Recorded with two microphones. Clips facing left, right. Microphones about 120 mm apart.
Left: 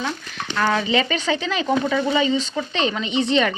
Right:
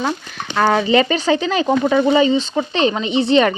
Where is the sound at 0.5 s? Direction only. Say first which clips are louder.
Right 6 dB; 50° right (ahead or behind).